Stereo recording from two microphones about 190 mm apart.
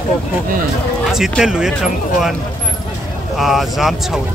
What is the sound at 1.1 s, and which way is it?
Speech, centre (ahead or behind).